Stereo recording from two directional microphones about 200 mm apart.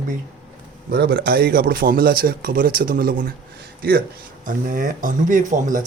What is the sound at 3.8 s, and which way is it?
Speech, 50° right (ahead or behind).